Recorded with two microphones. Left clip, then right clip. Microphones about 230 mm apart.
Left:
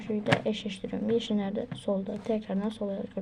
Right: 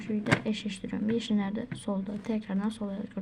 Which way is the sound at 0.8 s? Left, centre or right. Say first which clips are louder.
Left 4 dB; centre.